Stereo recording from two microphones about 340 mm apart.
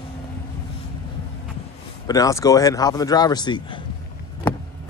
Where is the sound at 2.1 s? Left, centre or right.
Centre.